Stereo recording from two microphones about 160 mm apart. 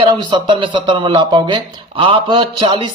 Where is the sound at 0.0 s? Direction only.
30° right (ahead or behind).